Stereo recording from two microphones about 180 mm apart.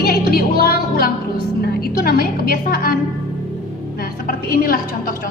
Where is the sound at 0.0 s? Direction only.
55° left (ahead or behind).